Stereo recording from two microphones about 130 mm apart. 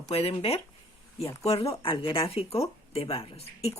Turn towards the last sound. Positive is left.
turn(degrees=50)  # may be behind; listen again after turning